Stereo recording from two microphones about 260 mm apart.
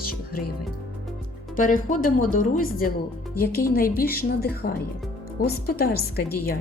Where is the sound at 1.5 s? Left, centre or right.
Left.